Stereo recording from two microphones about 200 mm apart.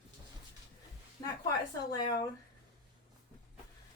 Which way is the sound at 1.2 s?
20° left (ahead or behind).